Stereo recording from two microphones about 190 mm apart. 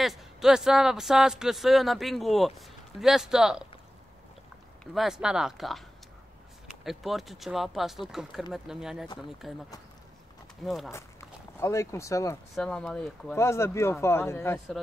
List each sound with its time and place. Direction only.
0.0 s a man's voice: centre (ahead or behind)
4.9 s a man's voice: centre (ahead or behind)
10.6 s a man's voice: centre (ahead or behind)
11.6 s speech: 15° left (ahead or behind)
12.5 s a man's voice: centre (ahead or behind)
13.4 s speech: 15° left (ahead or behind)